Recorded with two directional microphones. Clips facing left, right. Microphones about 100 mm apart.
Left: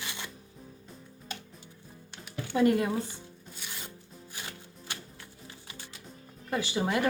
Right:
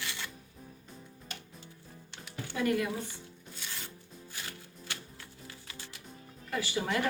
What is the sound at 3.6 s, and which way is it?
Filing, 20° left (ahead or behind).